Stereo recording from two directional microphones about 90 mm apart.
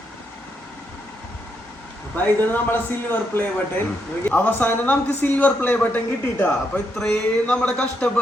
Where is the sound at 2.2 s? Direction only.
20° left (ahead or behind).